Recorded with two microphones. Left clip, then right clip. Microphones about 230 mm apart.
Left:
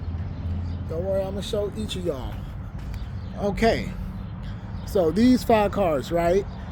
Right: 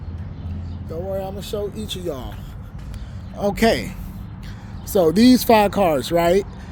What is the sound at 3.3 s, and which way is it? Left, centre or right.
A man's voice, right.